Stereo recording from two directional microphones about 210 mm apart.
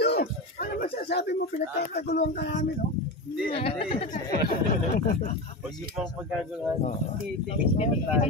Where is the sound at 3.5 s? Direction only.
30° left (ahead or behind).